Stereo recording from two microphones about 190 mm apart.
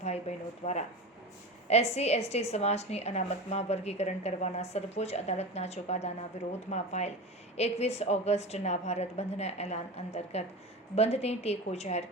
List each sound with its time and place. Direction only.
0.0 s a woman's voice: 35° left (ahead or behind)